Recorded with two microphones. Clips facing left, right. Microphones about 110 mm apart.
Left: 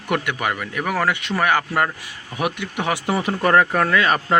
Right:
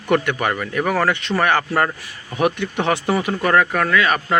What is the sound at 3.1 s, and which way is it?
Speech, 25° left (ahead or behind).